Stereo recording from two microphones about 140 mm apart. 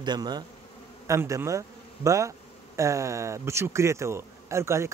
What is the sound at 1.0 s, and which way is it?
Speech, 20° right (ahead or behind).